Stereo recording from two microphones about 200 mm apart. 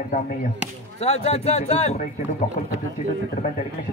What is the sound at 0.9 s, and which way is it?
Speech, 30° left (ahead or behind).